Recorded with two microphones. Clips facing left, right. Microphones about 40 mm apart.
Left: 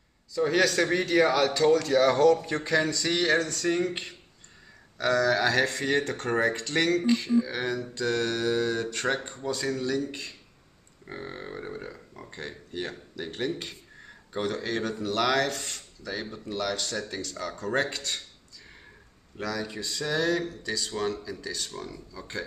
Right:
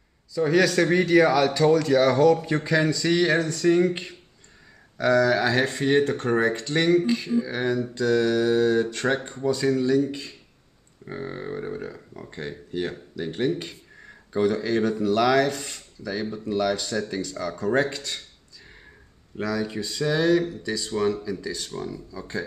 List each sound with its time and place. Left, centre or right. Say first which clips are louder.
0.3 s speech: right 3 dB; centre
1.5 s speech: right 3 dB; centre
3.3 s speech: right 4 dB; centre
4.9 s speech: right 4 dB; right
7.2 s speech: right 1 dB; centre
8.0 s mantra: right 6 dB; left
8.5 s speech: right 6 dB; centre
11.1 s speech: right 6 dB; centre
19.4 s speech: right 5 dB; right